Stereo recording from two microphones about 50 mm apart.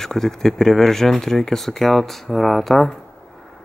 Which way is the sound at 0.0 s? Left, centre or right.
Centre.